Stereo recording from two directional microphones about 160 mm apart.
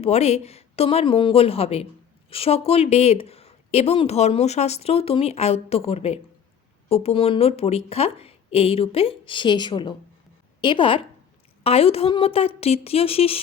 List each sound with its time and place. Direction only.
0.0 s speech: 40° left (ahead or behind)